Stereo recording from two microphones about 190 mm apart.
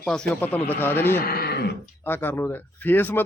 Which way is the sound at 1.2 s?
50° left (ahead or behind).